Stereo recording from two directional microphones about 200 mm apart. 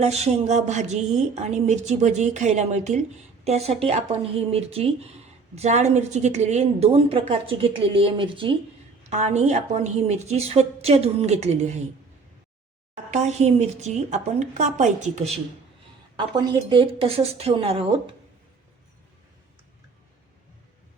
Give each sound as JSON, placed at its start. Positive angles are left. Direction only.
{"t": 0.0, "sound": "a woman's voice", "side_deg": -35}
{"t": 13.1, "sound": "a woman's voice", "side_deg": -35}
{"t": 16.1, "sound": "a woman's voice", "side_deg": -20}